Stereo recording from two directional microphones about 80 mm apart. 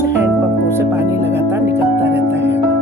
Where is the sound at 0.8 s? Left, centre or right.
Right.